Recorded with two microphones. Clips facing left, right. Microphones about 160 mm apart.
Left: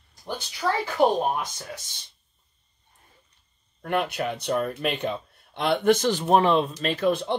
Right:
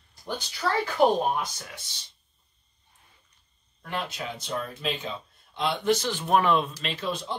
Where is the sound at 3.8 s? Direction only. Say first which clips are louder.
Left 7 dB; 60° left (ahead or behind); by 6.3 s 45° left (ahead or behind).